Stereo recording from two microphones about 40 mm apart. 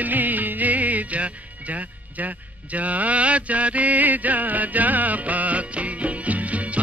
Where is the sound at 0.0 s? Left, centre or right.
Right.